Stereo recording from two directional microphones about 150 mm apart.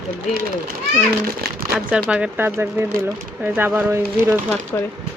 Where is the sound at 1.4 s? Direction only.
90° right.